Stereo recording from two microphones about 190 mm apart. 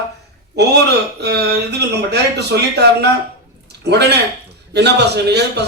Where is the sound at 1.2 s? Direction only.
60° right (ahead or behind).